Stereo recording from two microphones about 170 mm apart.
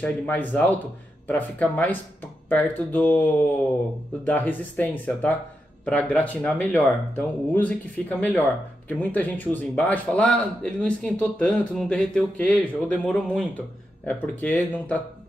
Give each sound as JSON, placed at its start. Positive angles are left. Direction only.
{"t": 0.0, "sound": "speech", "side_deg": 10}
{"t": 4.3, "sound": "speech", "side_deg": 10}